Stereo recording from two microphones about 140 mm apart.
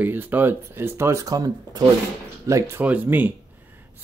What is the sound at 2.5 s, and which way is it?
Speech, 15° right (ahead or behind).